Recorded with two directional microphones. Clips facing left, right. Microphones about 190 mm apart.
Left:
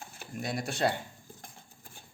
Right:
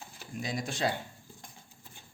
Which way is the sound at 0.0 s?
50° left (ahead or behind).